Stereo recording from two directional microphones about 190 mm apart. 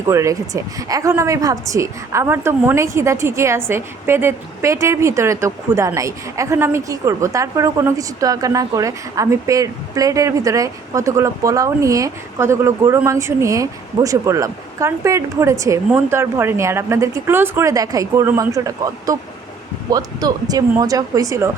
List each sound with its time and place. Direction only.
0.1 s a woman's voice: 15° right (ahead or behind)